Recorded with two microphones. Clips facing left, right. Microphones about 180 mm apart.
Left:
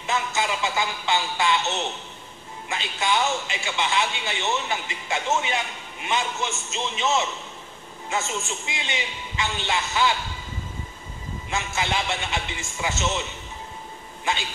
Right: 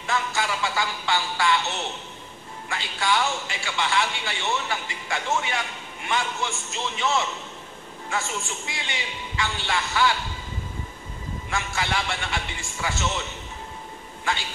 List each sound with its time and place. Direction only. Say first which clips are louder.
0.0 s a man's voice: left 1 dB; 20° left (ahead or behind)
11.5 s a man's voice: left 1 dB; 20° left (ahead or behind)
14.3 s a man's voice: left 1 dB; 20° left (ahead or behind)